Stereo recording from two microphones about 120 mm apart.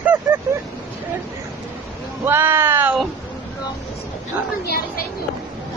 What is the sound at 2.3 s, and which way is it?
Speech, 20° right (ahead or behind).